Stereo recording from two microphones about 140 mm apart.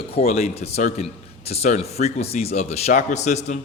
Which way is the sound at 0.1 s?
45° left (ahead or behind).